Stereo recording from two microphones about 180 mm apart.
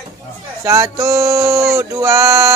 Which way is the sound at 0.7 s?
15° right (ahead or behind).